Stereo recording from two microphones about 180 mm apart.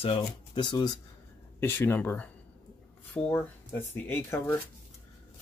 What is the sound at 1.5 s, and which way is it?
Speech, 15° left (ahead or behind).